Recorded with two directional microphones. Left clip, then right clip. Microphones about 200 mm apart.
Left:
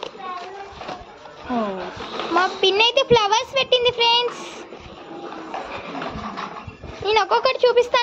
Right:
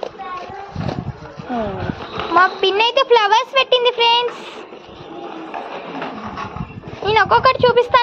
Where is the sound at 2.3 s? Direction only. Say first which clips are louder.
Right 5 dB; centre (ahead or behind).